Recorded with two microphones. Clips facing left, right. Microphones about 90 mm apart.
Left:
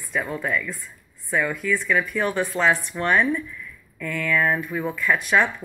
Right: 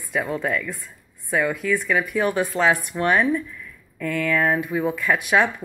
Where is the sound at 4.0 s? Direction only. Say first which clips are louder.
Right 3 dB; 50° right (ahead or behind).